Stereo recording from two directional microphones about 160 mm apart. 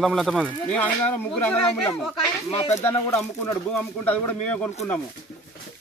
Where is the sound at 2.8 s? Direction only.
20° left (ahead or behind).